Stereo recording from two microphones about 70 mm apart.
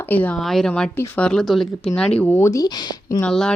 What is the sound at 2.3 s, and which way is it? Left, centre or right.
Speech, left.